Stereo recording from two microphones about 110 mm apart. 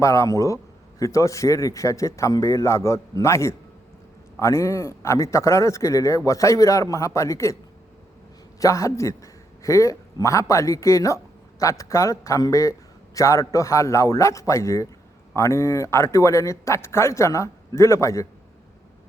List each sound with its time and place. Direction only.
0.0 s speech: 30° left (ahead or behind)
8.5 s a man's voice: 30° left (ahead or behind)